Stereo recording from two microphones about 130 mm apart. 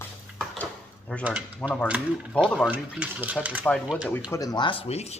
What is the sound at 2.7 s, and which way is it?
Speech, 10° right (ahead or behind).